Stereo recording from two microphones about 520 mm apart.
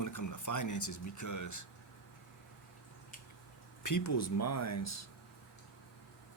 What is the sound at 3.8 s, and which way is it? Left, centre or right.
Speech, left.